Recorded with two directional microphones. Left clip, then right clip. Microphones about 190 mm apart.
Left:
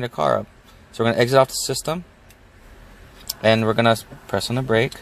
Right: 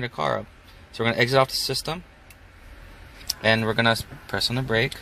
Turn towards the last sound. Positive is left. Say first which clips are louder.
# left 4 dB
turn(degrees=35)  # may be behind; listen again after turning